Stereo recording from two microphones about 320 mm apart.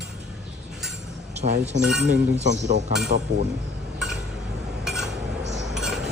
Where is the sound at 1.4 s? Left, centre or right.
Right.